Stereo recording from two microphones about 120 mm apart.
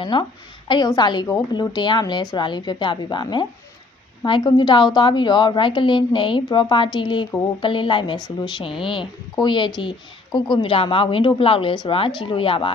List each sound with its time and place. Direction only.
0.0 s a woman's voice: 40° left (ahead or behind)